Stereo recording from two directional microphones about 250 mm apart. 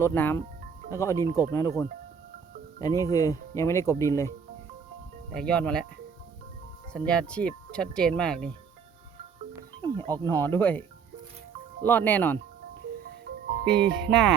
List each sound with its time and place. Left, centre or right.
0.0 s speech: centre
5.3 s speech: centre
6.9 s speech: centre
10.1 s speech: centre
11.9 s speech: centre
13.7 s speech: right
14.1 s speech: centre